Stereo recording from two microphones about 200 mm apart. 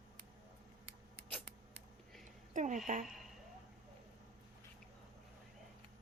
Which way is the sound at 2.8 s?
40° right (ahead or behind).